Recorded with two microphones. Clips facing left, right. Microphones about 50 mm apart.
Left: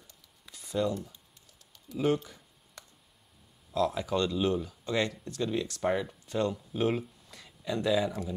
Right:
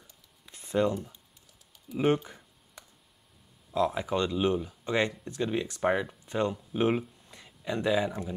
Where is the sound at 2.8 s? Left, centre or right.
Centre.